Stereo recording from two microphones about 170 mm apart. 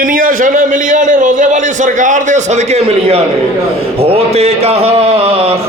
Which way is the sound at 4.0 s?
35° right (ahead or behind).